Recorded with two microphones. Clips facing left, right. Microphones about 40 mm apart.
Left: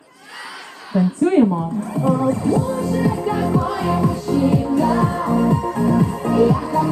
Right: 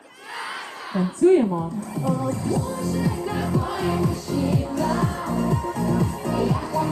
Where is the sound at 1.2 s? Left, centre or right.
Left.